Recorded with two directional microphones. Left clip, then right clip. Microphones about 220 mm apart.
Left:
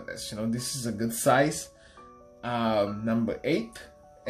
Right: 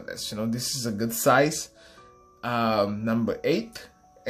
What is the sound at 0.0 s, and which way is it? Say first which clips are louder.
Speech: right 3 dB; 20° right (ahead or behind).